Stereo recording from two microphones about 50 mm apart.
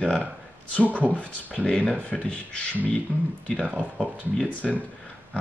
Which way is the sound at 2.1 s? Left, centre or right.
Centre.